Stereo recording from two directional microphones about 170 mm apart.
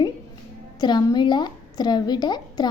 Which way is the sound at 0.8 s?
25° left (ahead or behind).